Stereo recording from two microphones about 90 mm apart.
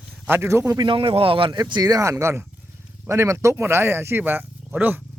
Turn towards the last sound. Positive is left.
turn(degrees=-20)  # may be behind; listen again after turning